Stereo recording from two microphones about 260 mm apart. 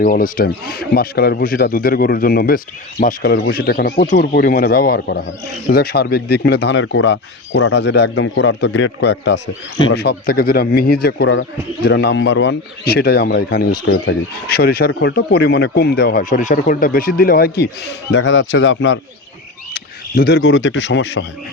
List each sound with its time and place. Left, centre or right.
0.0 s speech: left